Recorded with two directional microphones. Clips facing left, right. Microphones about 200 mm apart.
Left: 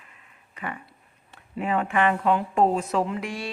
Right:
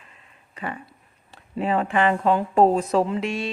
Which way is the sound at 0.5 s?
30° right (ahead or behind).